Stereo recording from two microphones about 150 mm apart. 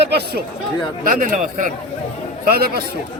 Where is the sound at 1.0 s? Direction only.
65° right (ahead or behind).